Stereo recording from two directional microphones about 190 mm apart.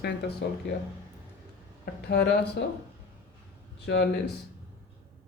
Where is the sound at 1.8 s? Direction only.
60° left (ahead or behind).